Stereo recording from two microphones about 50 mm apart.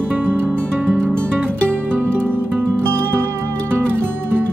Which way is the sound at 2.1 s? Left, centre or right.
Right.